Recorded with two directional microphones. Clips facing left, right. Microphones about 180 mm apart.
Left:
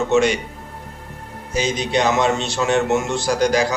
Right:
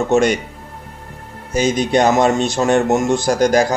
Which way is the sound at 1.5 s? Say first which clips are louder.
Right 5 dB; 50° right (ahead or behind).